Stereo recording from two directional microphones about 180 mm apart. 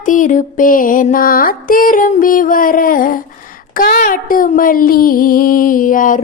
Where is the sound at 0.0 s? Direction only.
45° left (ahead or behind).